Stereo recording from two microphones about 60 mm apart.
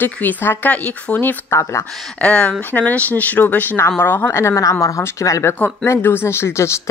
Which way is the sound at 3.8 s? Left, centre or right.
Left.